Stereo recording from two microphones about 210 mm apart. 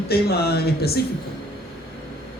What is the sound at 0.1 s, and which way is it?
Speech, 50° left (ahead or behind).